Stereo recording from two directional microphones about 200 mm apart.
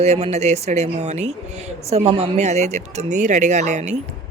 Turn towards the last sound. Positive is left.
turn(degrees=-35)  # may be behind; listen again after turning